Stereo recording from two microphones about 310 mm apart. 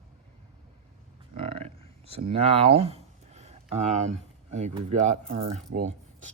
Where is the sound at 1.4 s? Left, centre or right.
Centre.